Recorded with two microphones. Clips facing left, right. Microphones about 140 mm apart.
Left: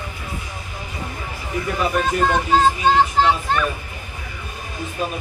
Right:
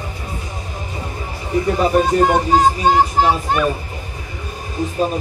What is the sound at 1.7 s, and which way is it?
Speech, 35° right (ahead or behind).